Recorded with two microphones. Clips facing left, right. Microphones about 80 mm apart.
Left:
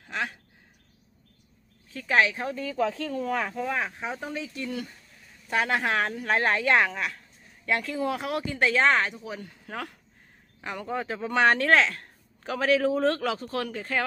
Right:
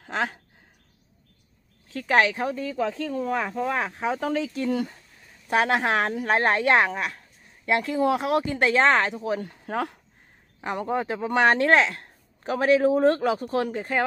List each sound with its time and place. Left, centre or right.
0.1 s speech: right
2.0 s speech: right
2.7 s speech: centre
3.6 s speech: right
4.4 s speech: right
5.7 s speech: right
8.4 s speech: right